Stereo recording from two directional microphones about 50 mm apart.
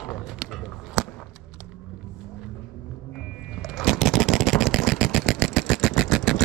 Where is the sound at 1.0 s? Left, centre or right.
Centre.